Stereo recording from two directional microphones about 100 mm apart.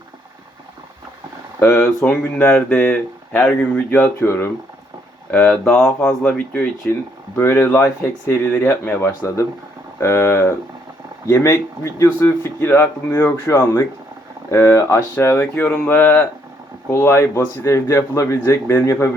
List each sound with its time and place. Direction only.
2.0 s speech: 10° left (ahead or behind)